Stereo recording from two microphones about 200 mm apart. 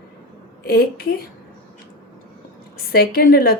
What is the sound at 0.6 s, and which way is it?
Speech, 50° left (ahead or behind).